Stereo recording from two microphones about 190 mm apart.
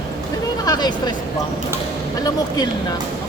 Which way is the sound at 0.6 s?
20° left (ahead or behind).